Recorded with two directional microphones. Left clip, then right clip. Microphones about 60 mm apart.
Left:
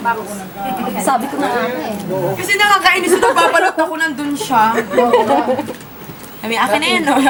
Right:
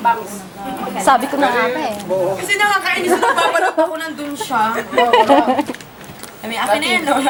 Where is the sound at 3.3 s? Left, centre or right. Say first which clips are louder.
Left 2 dB; left.